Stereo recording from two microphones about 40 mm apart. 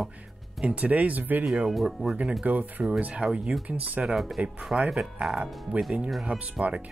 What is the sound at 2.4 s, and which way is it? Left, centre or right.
Speech, right.